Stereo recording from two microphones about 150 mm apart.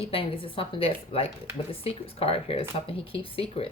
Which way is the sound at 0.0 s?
40° left (ahead or behind).